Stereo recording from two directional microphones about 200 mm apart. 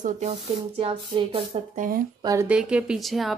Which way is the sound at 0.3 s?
25° right (ahead or behind).